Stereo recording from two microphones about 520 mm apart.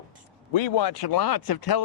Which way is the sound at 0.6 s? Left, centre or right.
Left.